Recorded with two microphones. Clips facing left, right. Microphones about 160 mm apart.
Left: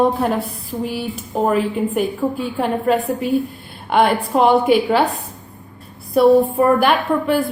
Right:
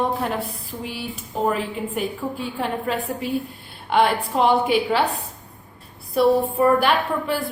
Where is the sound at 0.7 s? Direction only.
60° left (ahead or behind).